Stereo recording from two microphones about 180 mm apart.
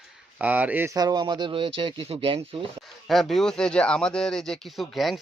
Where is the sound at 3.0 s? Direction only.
Centre (ahead or behind).